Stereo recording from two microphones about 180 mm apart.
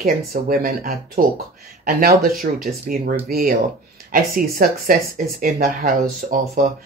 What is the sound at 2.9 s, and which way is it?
Speech, 50° right (ahead or behind).